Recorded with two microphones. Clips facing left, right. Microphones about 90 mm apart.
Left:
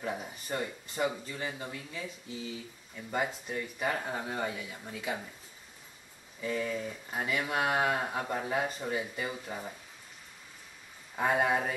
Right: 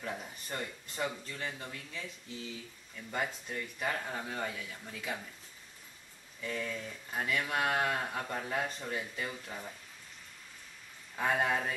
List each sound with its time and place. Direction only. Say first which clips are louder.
0.0 s speech: left 4 dB; 10° left (ahead or behind)
6.4 s speech: left 5 dB; 5° left (ahead or behind)
11.1 s speech: left 3 dB; 10° left (ahead or behind)